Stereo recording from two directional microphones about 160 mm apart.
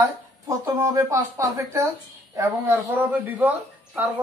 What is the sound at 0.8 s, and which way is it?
A woman's voice, 20° right (ahead or behind).